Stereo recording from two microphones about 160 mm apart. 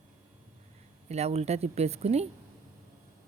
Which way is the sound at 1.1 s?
40° right (ahead or behind).